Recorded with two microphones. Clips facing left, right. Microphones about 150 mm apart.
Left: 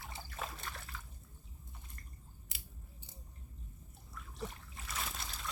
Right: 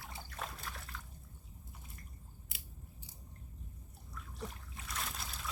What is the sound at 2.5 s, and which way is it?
Biting, centre (ahead or behind).